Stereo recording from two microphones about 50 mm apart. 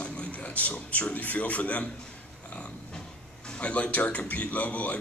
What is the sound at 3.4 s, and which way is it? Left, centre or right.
A man's voice, left.